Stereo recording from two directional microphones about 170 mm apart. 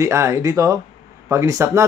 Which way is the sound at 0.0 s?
15° right (ahead or behind).